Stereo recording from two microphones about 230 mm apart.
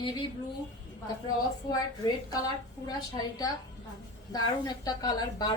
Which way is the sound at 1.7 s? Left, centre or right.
Centre.